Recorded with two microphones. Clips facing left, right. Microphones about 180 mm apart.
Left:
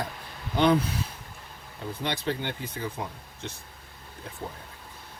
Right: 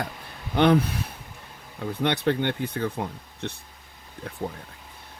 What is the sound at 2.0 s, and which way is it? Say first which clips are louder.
Speech: right 7 dB; 60° right (ahead or behind).